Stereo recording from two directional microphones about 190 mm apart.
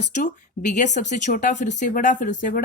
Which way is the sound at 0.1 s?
40° left (ahead or behind).